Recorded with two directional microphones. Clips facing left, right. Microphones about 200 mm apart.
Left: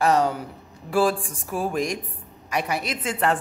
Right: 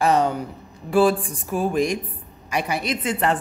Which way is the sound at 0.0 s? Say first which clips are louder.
Right 1 dB; centre (ahead or behind).